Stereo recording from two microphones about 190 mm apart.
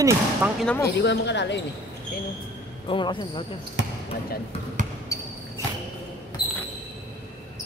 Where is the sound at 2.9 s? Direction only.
25° left (ahead or behind).